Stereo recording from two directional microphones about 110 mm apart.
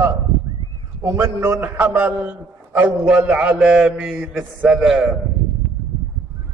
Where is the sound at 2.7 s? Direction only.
15° right (ahead or behind).